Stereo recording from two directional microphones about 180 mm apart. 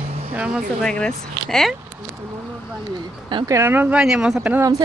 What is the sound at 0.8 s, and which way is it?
Speech, 5° left (ahead or behind).